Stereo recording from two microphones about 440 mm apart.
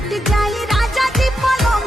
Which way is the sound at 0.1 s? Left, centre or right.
Centre.